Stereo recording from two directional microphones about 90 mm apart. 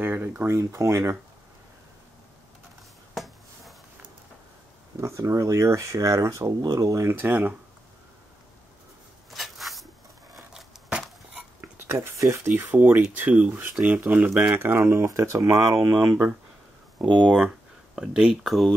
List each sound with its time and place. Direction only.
0.0 s a sound: 20° right (ahead or behind)
0.5 s speech: 30° right (ahead or behind)
5.0 s speech: 35° right (ahead or behind)
7.2 s speech: 20° right (ahead or behind)
9.3 s a sound: centre (ahead or behind)
11.6 s a sound: 25° right (ahead or behind)
12.4 s speech: 20° right (ahead or behind)
14.6 s speech: 25° right (ahead or behind)
17.0 s speech: 55° right (ahead or behind)
17.9 s speech: 5° right (ahead or behind)